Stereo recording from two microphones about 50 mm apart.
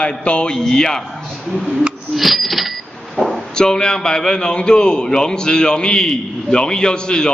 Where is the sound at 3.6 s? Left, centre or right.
Centre.